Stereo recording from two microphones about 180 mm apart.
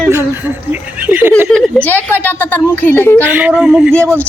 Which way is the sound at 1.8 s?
10° left (ahead or behind).